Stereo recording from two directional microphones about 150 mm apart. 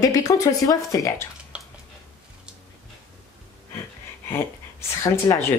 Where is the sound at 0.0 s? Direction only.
20° left (ahead or behind).